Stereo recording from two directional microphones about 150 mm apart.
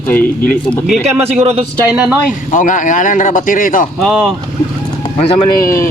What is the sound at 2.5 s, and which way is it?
Speech, 60° left (ahead or behind).